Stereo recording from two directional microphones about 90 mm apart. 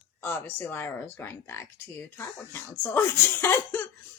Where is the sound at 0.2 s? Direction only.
25° left (ahead or behind).